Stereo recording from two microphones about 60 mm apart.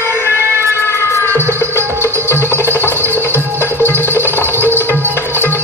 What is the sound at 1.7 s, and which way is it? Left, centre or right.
Music, right.